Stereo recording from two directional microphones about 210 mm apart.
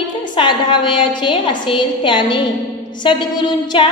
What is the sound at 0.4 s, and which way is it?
A woman's voice, 20° left (ahead or behind).